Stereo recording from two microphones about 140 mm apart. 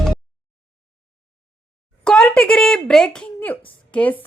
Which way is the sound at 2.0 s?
5° left (ahead or behind).